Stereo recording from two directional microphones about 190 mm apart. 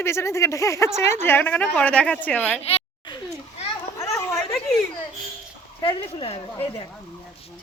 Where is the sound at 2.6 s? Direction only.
30° left (ahead or behind).